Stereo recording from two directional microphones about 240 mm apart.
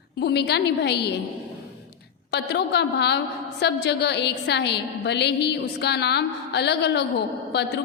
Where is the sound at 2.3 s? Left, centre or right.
Left.